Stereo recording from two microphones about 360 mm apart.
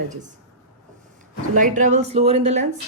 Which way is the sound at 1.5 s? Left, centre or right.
Right.